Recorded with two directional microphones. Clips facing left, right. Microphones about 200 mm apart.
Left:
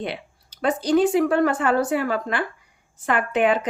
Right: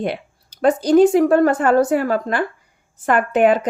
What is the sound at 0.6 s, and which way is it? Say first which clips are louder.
Speech: right 6 dB; 45° right (ahead or behind).